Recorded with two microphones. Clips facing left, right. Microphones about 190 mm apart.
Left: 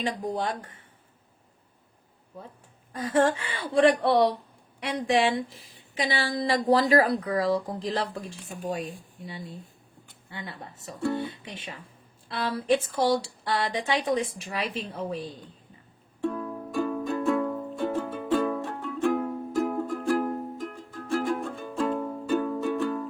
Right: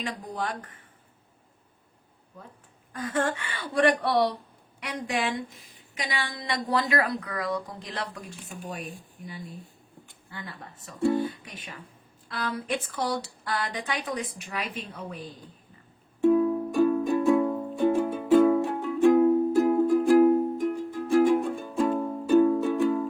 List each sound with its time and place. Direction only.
0.0 s speech: 25° left (ahead or behind)
2.9 s speech: 25° left (ahead or behind)
16.2 s music: 10° right (ahead or behind)